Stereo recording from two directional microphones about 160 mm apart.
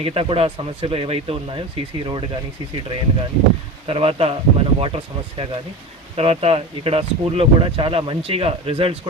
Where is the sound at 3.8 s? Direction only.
35° right (ahead or behind).